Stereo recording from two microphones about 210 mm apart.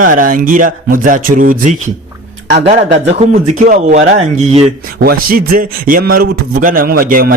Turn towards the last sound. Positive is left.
turn(degrees=-40)  # may be behind; listen again after turning